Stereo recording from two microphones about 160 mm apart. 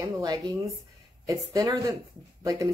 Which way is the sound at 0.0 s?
20° right (ahead or behind).